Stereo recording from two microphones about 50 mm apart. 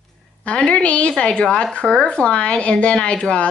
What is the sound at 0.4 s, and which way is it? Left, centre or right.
A woman's voice, left.